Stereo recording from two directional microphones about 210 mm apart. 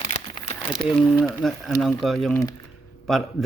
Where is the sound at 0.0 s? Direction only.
25° left (ahead or behind).